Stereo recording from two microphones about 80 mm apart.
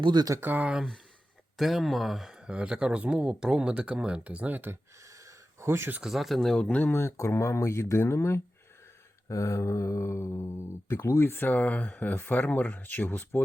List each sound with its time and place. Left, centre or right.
0.0 s speech: right
0.3 s speech: right
0.6 s speech: centre
5.2 s a sound: right
6.0 s speech: centre
6.9 s speech: left